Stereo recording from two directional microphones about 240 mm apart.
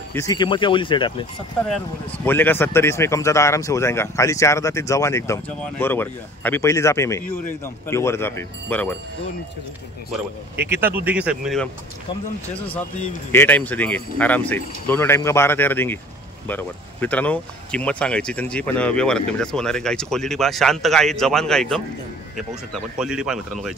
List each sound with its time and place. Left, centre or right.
0.1 s speech: centre
2.2 s speech: centre
10.5 s speech: centre
13.3 s speech: centre